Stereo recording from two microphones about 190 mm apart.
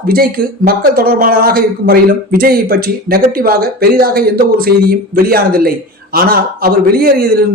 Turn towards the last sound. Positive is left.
turn(degrees=-50)  # may be behind; listen again after turning